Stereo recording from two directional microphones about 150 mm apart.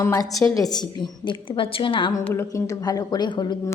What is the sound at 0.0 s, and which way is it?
A woman's voice, 20° left (ahead or behind).